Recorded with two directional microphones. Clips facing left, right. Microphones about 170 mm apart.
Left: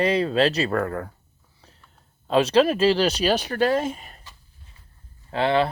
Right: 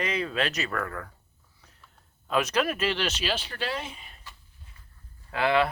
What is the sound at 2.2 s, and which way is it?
Speech, 30° left (ahead or behind).